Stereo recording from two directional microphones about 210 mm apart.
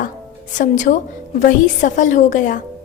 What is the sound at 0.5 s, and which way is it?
A woman's voice, 35° left (ahead or behind).